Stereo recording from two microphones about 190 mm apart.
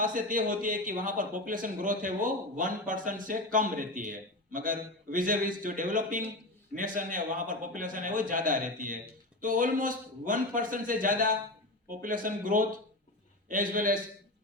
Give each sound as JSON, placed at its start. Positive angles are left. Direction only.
{"t": 0.0, "sound": "speech", "side_deg": -45}